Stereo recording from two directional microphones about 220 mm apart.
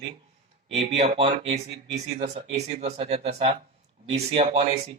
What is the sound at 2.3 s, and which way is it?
Speech, 30° right (ahead or behind).